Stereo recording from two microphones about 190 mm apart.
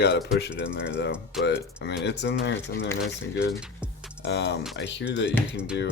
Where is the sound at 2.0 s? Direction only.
65° left (ahead or behind).